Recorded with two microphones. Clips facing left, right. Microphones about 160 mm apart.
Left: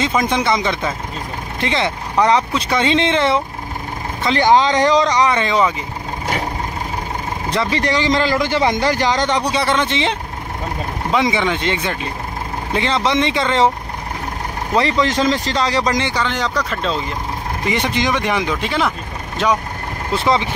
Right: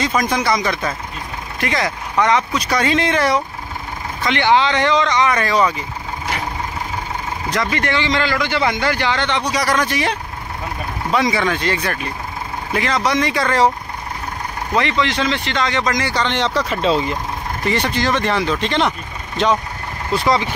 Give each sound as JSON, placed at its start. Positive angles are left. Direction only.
{"t": 0.0, "sound": "speech", "side_deg": 25}
{"t": 4.2, "sound": "speech", "side_deg": 35}
{"t": 5.4, "sound": "speech", "side_deg": 20}
{"t": 7.5, "sound": "speech", "side_deg": 35}
{"t": 9.5, "sound": "speech", "side_deg": 25}
{"t": 14.7, "sound": "speech", "side_deg": 35}
{"t": 16.1, "sound": "speech", "side_deg": 5}
{"t": 17.6, "sound": "speech", "side_deg": 20}
{"t": 20.2, "sound": "speech", "side_deg": 20}